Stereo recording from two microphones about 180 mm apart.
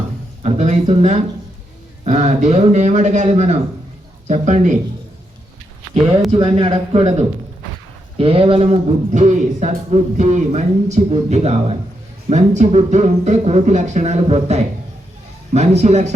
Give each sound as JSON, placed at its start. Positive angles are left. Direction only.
{"t": 0.4, "sound": "a man's voice", "side_deg": -40}
{"t": 6.3, "sound": "a man's voice", "side_deg": -30}